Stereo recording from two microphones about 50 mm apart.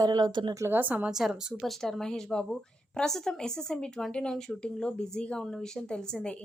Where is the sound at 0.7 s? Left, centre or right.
Right.